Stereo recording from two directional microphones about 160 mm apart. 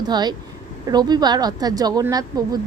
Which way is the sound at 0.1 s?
25° right (ahead or behind).